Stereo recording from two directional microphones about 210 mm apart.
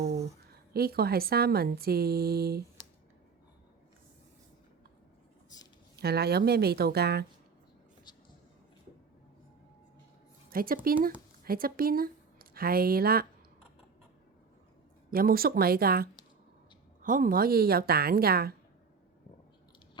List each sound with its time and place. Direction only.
0.7 s speech: 45° right (ahead or behind)
6.0 s speech: 50° right (ahead or behind)
10.5 s speech: 45° right (ahead or behind)
15.1 s speech: 45° right (ahead or behind)